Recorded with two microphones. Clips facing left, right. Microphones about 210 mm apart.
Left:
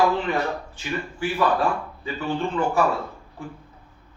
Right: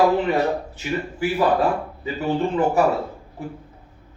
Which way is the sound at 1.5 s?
20° right (ahead or behind).